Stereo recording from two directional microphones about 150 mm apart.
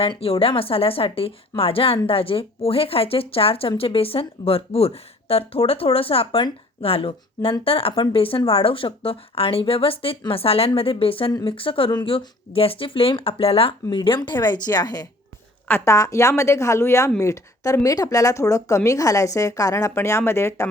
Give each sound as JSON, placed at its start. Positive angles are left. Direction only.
{"t": 0.0, "sound": "a woman's voice", "side_deg": 40}
{"t": 15.6, "sound": "a woman's voice", "side_deg": 15}